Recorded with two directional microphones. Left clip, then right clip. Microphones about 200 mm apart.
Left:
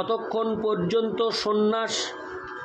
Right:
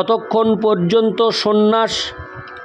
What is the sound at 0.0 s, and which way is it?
A man's voice, 45° right (ahead or behind).